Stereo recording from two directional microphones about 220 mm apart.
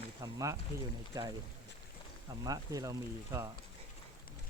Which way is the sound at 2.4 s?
15° right (ahead or behind).